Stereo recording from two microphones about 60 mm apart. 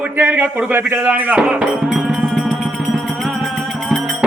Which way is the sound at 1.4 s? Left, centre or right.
Centre.